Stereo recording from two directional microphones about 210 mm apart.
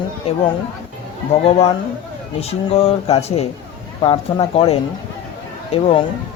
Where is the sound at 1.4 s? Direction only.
30° left (ahead or behind).